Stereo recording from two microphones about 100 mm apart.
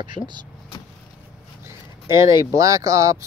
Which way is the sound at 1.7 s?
30° right (ahead or behind).